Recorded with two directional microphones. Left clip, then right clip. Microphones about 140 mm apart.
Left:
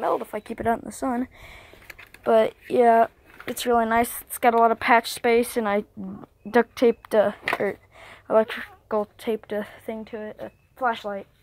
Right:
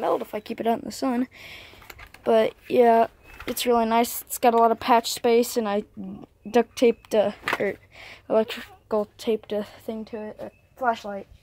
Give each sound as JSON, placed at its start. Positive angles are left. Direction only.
{"t": 0.0, "sound": "speech", "side_deg": -15}
{"t": 2.2, "sound": "speech", "side_deg": -5}
{"t": 7.6, "sound": "a woman's voice", "side_deg": -15}
{"t": 10.1, "sound": "speech", "side_deg": 20}
{"t": 10.8, "sound": "speech", "side_deg": 30}